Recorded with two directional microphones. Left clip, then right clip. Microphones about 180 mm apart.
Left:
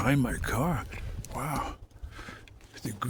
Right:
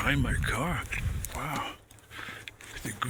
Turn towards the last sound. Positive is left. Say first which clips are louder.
# right 2 dB
turn(degrees=45)  # may be behind; listen again after turning